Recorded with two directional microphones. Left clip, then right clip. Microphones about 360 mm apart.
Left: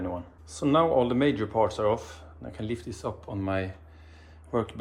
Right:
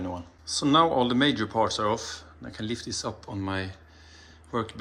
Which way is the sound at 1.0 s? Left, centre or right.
Centre.